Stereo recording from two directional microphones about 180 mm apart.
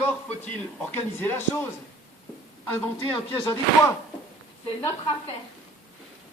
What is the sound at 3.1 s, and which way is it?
Speech, 15° left (ahead or behind).